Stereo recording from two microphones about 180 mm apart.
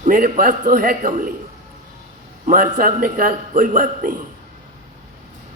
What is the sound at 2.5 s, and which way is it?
A man's voice, 50° right (ahead or behind).